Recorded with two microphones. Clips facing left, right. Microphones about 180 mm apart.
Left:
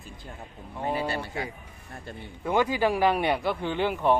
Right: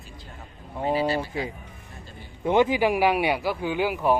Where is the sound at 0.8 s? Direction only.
25° right (ahead or behind); by 4.1 s 5° right (ahead or behind).